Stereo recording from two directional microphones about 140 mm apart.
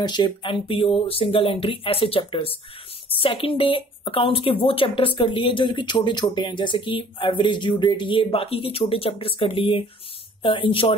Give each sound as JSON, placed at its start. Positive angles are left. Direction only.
{"t": 0.0, "sound": "speech", "side_deg": 35}